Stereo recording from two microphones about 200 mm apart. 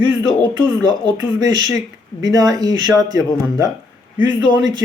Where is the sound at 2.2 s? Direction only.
20° right (ahead or behind).